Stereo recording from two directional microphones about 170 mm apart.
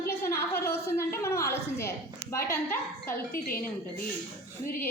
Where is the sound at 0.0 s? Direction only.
15° left (ahead or behind).